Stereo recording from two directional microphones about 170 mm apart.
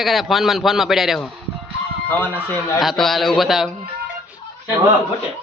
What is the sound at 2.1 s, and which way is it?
Speech, 10° left (ahead or behind).